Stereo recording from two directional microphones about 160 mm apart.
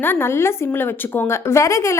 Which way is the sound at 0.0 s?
15° left (ahead or behind).